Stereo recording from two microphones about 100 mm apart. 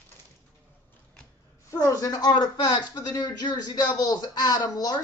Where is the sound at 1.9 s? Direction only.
35° left (ahead or behind).